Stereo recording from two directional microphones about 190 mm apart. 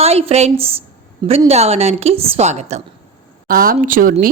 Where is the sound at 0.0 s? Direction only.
30° right (ahead or behind).